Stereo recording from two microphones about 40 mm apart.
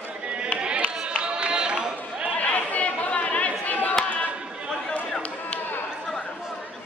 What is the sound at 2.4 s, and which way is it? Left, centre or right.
Chatter, left.